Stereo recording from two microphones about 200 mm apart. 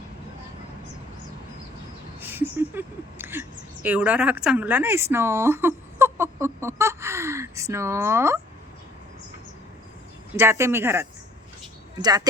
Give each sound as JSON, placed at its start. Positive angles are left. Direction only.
{"t": 2.3, "sound": "a sound", "side_deg": -10}
{"t": 3.8, "sound": "speech", "side_deg": -5}
{"t": 10.3, "sound": "a woman's voice", "side_deg": -15}